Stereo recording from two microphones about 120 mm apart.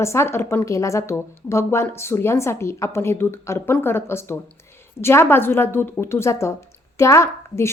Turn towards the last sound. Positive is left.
turn(degrees=25)  # may be behind; listen again after turning